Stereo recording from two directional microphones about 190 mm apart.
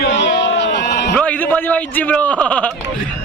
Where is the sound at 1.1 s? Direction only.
10° left (ahead or behind).